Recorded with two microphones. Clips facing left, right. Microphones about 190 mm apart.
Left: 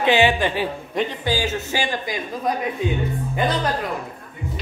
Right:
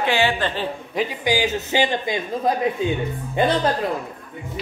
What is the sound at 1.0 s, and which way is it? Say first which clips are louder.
A man's voice: right 1 dB; 10° right (ahead or behind).